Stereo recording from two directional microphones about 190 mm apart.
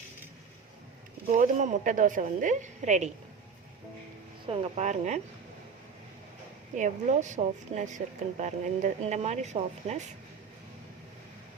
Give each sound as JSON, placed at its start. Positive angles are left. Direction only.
{"t": 1.3, "sound": "a woman's voice", "side_deg": -40}
{"t": 4.4, "sound": "a woman's voice", "side_deg": -35}
{"t": 6.7, "sound": "a woman's voice", "side_deg": -40}